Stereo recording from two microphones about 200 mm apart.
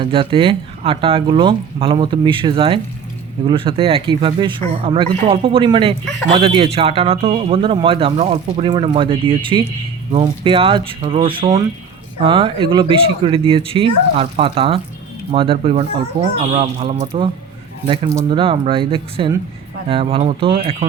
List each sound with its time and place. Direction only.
0.0 s speech: 25° right (ahead or behind)